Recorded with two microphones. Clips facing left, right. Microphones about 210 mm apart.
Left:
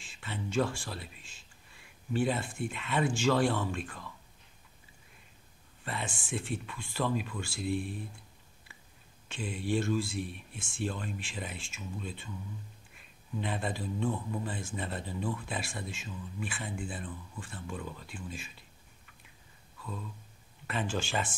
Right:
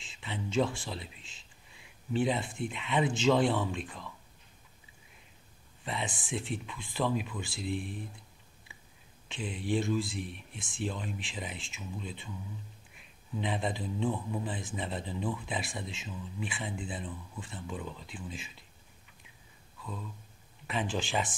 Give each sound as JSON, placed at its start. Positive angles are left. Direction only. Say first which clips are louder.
{"t": 0.0, "sound": "speech", "louder": "right 1 dB", "side_deg": -20}
{"t": 5.9, "sound": "speech", "louder": "right 1 dB", "side_deg": -20}
{"t": 9.3, "sound": "speech", "louder": "even", "side_deg": -20}
{"t": 13.4, "sound": "speech", "louder": "right 1 dB", "side_deg": -15}
{"t": 20.6, "sound": "speech", "louder": "even", "side_deg": -15}